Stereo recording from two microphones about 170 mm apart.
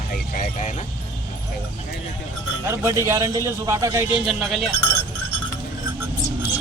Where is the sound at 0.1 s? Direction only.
50° left (ahead or behind).